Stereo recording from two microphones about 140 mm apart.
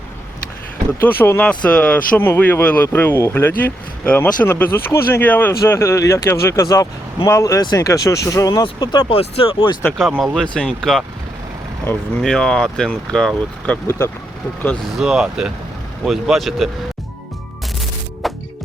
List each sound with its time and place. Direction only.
1.2 s speech: 10° left (ahead or behind); by 9.7 s 40° left (ahead or behind)
10.0 s speech: 5° right (ahead or behind)
10.3 s speech: 5° left (ahead or behind)
12.2 s speech: 5° left (ahead or behind)
14.9 s speech: 5° right (ahead or behind)
18.2 s music: centre (ahead or behind)